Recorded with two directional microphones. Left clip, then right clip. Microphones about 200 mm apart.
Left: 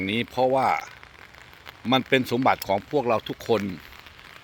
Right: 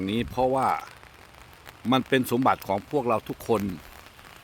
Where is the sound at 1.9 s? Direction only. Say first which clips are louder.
Left 2 dB; 5° right (ahead or behind).